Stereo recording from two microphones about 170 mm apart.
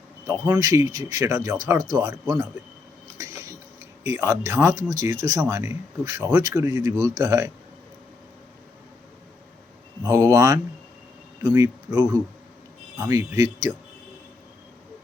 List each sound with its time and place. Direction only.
0.3 s speech: 15° right (ahead or behind)
3.2 s cutlery: 20° right (ahead or behind)
4.0 s speech: 20° right (ahead or behind)
10.0 s speech: 20° right (ahead or behind)